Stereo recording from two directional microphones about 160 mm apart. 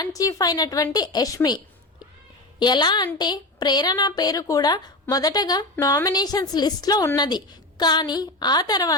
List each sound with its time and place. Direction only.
0.0 s a woman's voice: 20° left (ahead or behind)